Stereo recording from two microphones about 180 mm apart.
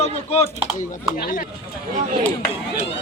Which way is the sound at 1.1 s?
50° left (ahead or behind).